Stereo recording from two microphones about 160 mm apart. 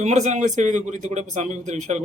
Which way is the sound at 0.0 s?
45° right (ahead or behind).